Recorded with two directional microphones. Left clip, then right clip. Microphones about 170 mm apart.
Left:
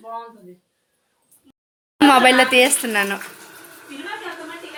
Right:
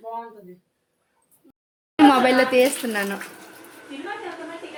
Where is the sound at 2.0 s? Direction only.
5° left (ahead or behind).